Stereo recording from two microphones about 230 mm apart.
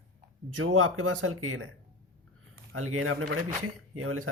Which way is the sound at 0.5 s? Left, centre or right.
Right.